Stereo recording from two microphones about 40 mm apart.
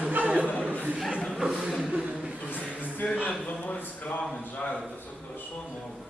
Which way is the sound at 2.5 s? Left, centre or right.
Left.